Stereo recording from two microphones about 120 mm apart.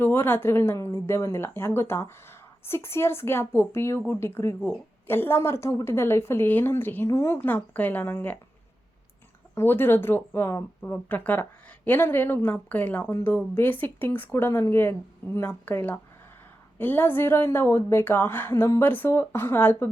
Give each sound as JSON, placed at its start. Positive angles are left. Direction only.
{"t": 0.0, "sound": "a woman's voice", "side_deg": 20}
{"t": 9.6, "sound": "a woman's voice", "side_deg": 20}